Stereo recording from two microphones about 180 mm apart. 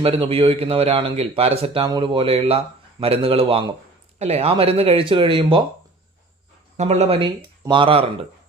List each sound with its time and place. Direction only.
0.0 s speech: 30° right (ahead or behind)
6.7 s speech: 35° right (ahead or behind)